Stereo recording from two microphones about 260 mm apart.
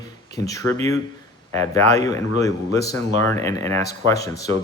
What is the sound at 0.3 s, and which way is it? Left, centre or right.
Speech, centre.